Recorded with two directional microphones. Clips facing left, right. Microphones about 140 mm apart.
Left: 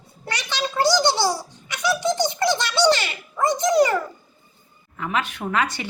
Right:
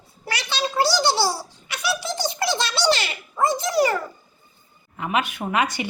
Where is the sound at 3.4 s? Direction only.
15° left (ahead or behind).